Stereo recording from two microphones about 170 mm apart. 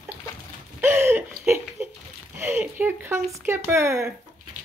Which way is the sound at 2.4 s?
15° right (ahead or behind).